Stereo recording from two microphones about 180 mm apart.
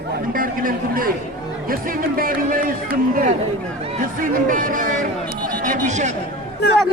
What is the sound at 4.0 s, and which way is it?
Speech, 50° right (ahead or behind).